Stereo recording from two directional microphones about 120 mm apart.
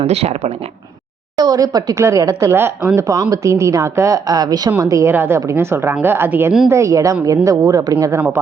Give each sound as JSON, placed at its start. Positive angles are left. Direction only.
{"t": 0.0, "sound": "speech", "side_deg": -60}
{"t": 1.4, "sound": "speech", "side_deg": -30}